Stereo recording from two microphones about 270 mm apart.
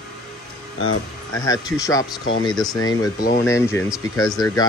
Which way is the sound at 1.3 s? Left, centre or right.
Centre.